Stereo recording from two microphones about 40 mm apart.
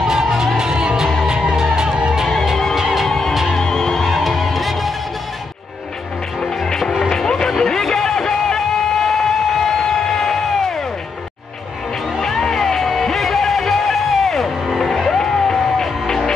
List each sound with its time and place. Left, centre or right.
0.0 s music: centre
2.7 s music: centre
3.1 s music: centre
4.1 s music: centre
6.4 s music: centre
6.8 s music: centre
7.1 s music: centre
12.2 s music: centre